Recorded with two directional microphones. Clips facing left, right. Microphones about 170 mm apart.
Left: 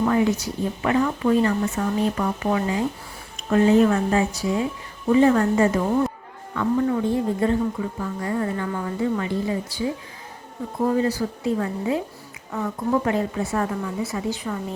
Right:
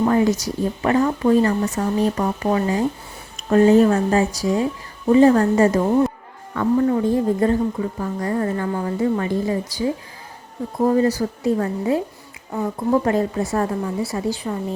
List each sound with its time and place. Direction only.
0.0 s speech: 40° right (ahead or behind)